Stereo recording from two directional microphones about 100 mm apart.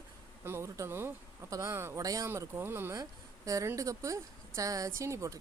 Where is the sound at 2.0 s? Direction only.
35° right (ahead or behind).